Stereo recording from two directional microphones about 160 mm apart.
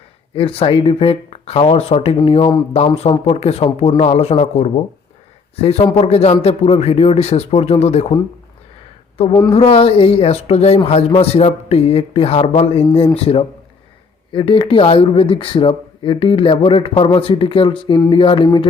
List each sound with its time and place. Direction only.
0.3 s speech: 35° left (ahead or behind)
9.5 s speech: 35° left (ahead or behind)